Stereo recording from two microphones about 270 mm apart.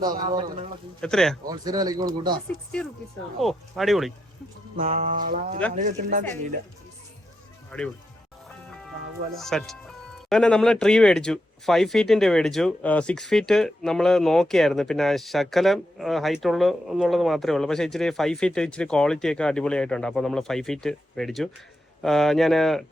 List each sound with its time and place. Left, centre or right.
0.2 s music: centre
1.0 s speech: centre
1.5 s speech: centre
3.4 s speech: centre
4.8 s music: right
7.7 s speech: centre
8.4 s music: centre
9.3 s speech: centre